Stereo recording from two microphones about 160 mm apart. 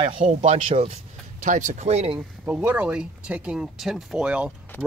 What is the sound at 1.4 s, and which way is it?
Speech, 50° right (ahead or behind).